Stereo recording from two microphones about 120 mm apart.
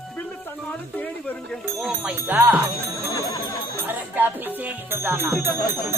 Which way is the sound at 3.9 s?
15° right (ahead or behind).